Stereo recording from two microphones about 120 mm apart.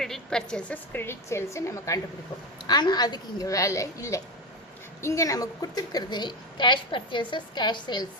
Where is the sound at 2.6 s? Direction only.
35° left (ahead or behind).